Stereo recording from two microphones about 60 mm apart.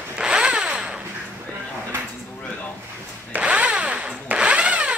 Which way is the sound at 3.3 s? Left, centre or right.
Right.